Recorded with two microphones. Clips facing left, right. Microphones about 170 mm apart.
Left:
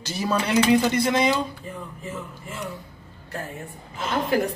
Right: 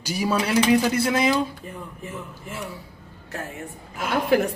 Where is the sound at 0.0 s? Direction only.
10° right (ahead or behind).